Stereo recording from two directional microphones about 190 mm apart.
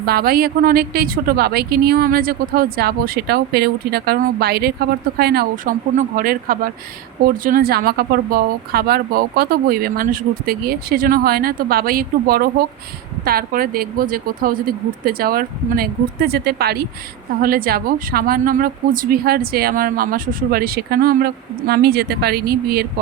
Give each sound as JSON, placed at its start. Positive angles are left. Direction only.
{"t": 0.0, "sound": "speech", "side_deg": -55}